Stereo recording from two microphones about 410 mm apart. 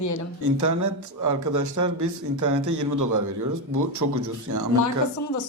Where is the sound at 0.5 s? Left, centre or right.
Right.